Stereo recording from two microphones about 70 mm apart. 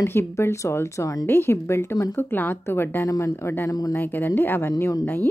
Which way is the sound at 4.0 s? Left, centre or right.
Left.